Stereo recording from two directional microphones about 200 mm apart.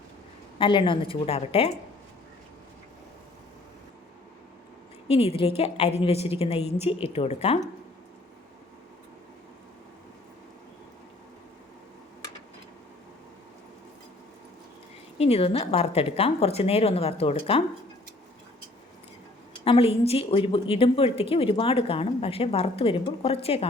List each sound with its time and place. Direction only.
0.6 s a woman's voice: 25° left (ahead or behind)
5.0 s a woman's voice: 30° left (ahead or behind)
15.2 s a woman's voice: 30° left (ahead or behind)
19.6 s a woman's voice: 30° left (ahead or behind)